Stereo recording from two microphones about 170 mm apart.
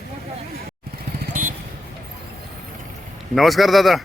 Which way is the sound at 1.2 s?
55° right (ahead or behind).